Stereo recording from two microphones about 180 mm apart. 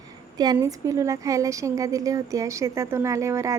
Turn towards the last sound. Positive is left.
turn(degrees=-15)  # may be behind; listen again after turning